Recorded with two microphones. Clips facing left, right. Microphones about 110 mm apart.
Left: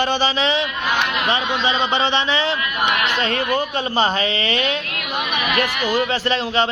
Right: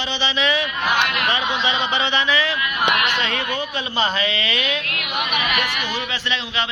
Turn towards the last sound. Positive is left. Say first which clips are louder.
# left 6 dB
turn(degrees=35)  # may be behind; listen again after turning